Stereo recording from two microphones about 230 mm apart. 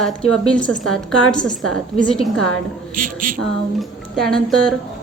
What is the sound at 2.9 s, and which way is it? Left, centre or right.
Speech, right.